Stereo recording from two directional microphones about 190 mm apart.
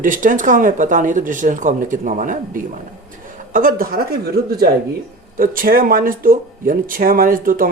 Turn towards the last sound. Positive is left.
turn(degrees=-45)  # may be behind; listen again after turning